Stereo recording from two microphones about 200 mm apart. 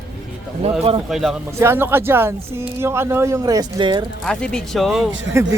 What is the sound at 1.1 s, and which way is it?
Speech, centre (ahead or behind).